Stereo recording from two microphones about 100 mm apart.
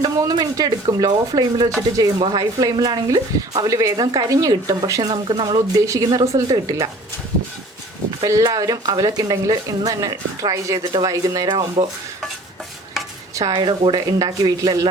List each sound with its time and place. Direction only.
0.0 s speech: 40° right (ahead or behind)
5.8 s speech: 35° right (ahead or behind)
8.2 s speech: 35° right (ahead or behind)
13.3 s speech: 45° right (ahead or behind)